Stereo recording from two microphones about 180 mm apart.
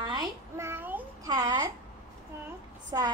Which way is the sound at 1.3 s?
20° right (ahead or behind).